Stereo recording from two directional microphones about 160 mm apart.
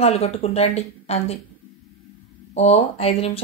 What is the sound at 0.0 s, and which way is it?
A woman's voice, 40° left (ahead or behind).